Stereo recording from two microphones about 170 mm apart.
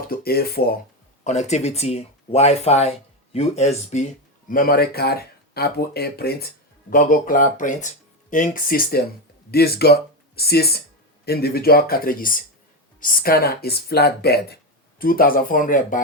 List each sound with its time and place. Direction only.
0.1 s speech: 65° left (ahead or behind)
1.2 s speech: 40° left (ahead or behind)
4.4 s speech: 55° left (ahead or behind)
6.9 s speech: 50° left (ahead or behind)
9.5 s speech: 65° left (ahead or behind); by 16.0 s 50° left (ahead or behind)